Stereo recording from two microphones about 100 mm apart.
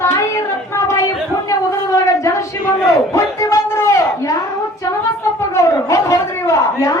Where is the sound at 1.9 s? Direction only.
35° left (ahead or behind).